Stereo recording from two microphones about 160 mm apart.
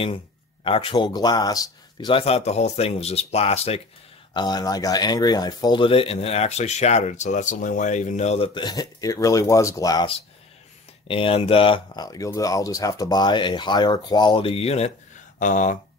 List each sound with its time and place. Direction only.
0.7 s speech: 35° left (ahead or behind)
4.3 s speech: 25° left (ahead or behind); by 8.5 s 45° left (ahead or behind)
8.5 s speech: 25° left (ahead or behind)
11.1 s speech: 35° left (ahead or behind)
15.3 s speech: 50° left (ahead or behind)